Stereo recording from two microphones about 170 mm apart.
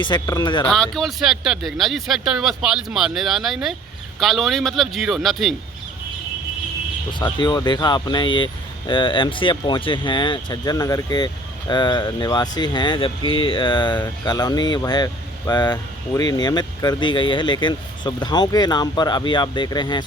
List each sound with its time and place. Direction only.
0.0 s speech: 25° left (ahead or behind)
0.7 s speech: 5° left (ahead or behind)
7.3 s speech: 25° left (ahead or behind)